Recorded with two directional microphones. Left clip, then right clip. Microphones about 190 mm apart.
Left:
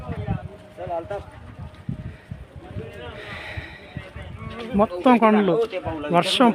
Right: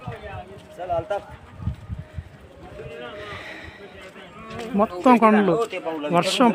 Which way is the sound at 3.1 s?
5° left (ahead or behind).